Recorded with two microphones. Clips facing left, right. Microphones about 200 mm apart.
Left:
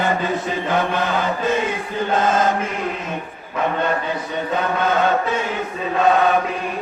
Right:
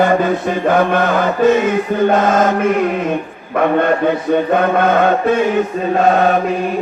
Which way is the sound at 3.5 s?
60° right (ahead or behind).